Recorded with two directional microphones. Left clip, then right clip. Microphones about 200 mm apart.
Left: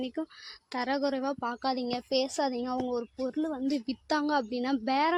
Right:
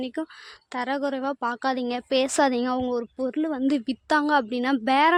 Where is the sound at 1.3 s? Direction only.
20° right (ahead or behind).